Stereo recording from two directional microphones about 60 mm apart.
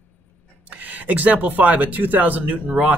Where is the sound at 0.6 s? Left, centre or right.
Right.